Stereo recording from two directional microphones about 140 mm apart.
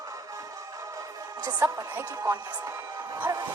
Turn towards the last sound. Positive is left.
turn(degrees=-30)  # may be behind; listen again after turning